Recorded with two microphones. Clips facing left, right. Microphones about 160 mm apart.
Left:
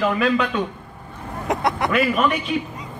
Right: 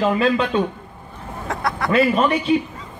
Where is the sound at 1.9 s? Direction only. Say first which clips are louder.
Right 4 dB; 30° right (ahead or behind).